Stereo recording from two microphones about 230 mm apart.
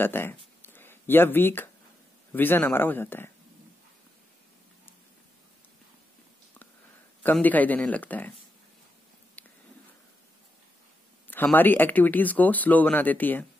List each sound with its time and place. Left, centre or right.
0.0 s speech: centre
7.2 s speech: centre
9.4 s a sound: centre
11.2 s speech: centre